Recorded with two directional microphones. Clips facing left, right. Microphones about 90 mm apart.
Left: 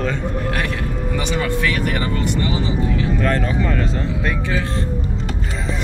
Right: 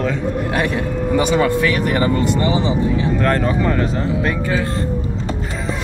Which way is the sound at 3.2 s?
Centre (ahead or behind).